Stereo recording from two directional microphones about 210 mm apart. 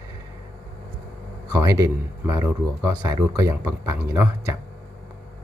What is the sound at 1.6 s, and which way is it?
Speech, 15° right (ahead or behind).